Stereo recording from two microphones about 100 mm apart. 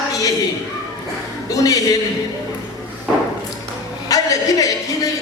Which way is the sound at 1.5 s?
35° left (ahead or behind).